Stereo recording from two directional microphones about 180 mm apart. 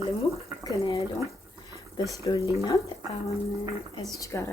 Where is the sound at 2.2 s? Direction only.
20° left (ahead or behind).